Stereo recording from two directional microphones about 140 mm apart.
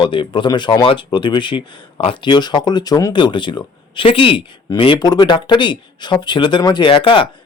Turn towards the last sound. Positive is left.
turn(degrees=35)  # may be behind; listen again after turning